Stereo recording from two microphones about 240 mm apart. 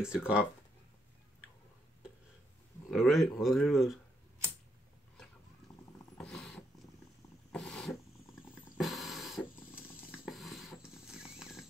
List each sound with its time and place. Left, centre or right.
0.0 s speech: centre
2.9 s speech: centre
6.1 s dog: centre
7.5 s a sound: centre
10.1 s horse: centre